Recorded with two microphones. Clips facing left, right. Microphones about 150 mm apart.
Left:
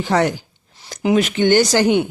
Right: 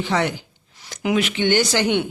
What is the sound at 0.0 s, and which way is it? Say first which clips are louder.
Speech: left 4 dB; 45° left (ahead or behind).